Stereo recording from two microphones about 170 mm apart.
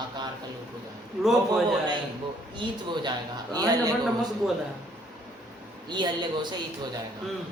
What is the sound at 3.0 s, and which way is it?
Speech, 25° right (ahead or behind).